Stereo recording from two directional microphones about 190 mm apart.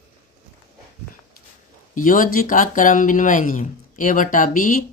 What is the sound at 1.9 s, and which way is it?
Speech, 45° left (ahead or behind).